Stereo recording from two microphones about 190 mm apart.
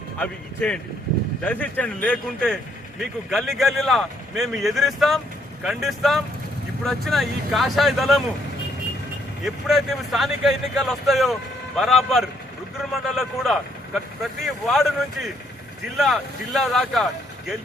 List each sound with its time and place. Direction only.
0.2 s speech: 5° left (ahead or behind)
9.4 s speech: centre (ahead or behind)